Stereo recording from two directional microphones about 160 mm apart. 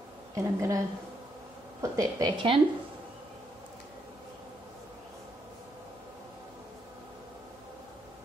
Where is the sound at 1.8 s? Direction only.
20° right (ahead or behind).